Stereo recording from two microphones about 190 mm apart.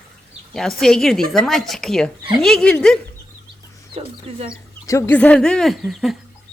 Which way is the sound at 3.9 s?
30° right (ahead or behind).